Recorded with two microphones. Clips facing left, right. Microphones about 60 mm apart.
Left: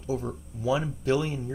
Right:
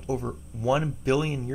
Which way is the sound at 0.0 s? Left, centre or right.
Right.